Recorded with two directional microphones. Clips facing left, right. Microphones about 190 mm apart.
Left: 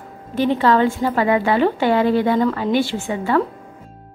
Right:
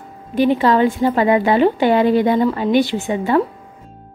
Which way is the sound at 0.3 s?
15° right (ahead or behind).